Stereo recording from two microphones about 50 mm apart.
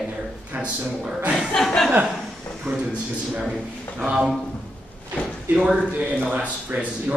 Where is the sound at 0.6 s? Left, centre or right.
Right.